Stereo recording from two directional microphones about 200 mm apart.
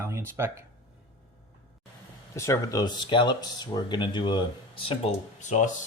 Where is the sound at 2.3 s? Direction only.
15° left (ahead or behind).